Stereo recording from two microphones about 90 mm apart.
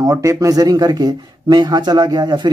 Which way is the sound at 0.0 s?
35° right (ahead or behind).